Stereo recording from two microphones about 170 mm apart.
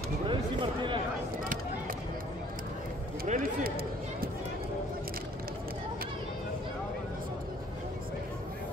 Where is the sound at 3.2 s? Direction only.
55° right (ahead or behind).